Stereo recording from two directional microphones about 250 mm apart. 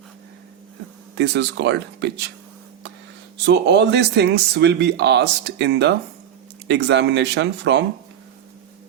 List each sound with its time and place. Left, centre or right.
1.2 s speech: right
3.4 s speech: right